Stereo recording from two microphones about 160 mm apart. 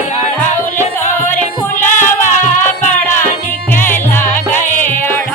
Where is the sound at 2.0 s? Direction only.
15° left (ahead or behind).